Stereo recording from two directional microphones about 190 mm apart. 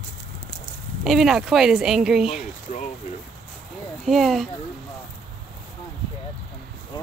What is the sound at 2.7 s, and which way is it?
Speech, 40° left (ahead or behind).